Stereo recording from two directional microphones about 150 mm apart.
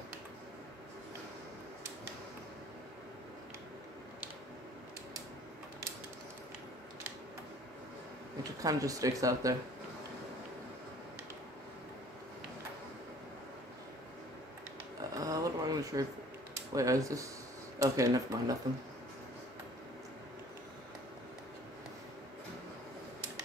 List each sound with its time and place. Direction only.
8.6 s speech: 25° right (ahead or behind)
15.1 s a sound: 25° right (ahead or behind)
16.7 s speech: 20° right (ahead or behind)